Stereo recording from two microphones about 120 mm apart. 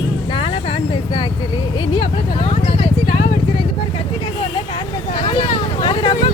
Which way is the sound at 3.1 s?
70° left (ahead or behind).